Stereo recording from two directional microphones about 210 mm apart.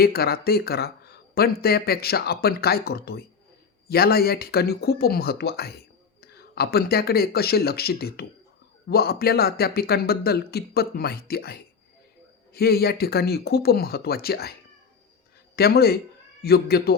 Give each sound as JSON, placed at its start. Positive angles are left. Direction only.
{"t": 0.0, "sound": "speech", "side_deg": 45}
{"t": 15.5, "sound": "speech", "side_deg": 45}